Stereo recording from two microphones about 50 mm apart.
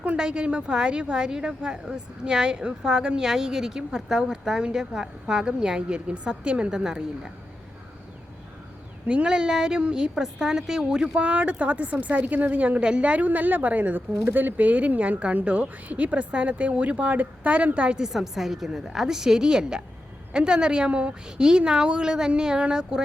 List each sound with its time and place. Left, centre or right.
0.0 s a woman's voice: right
9.0 s a woman's voice: centre